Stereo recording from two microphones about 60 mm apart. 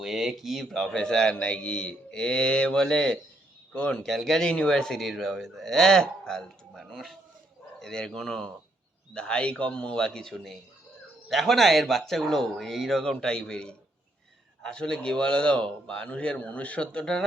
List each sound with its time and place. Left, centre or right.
0.0 s a man's voice: centre
13.0 s a man's voice: centre